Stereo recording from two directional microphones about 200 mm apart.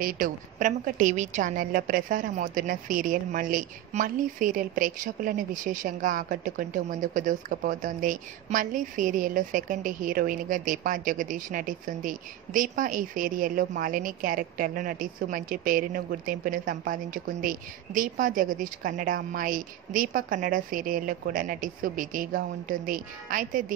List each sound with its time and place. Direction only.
0.0 s a woman's voice: 40° right (ahead or behind)